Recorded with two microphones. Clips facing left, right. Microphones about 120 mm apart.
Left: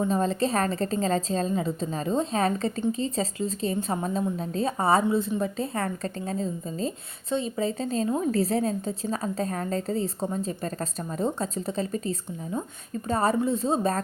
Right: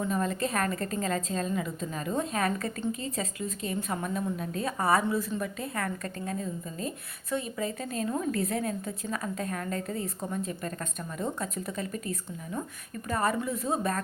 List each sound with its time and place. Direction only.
0.0 s a woman's voice: 30° left (ahead or behind)